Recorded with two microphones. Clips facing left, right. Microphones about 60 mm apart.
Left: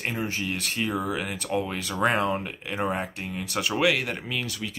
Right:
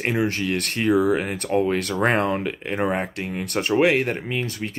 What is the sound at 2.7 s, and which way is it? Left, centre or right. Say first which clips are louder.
Speech: right 3 dB; right.